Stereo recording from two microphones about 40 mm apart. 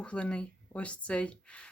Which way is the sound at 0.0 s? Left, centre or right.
Left.